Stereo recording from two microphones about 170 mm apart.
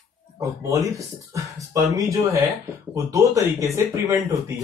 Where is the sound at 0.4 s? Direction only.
20° right (ahead or behind).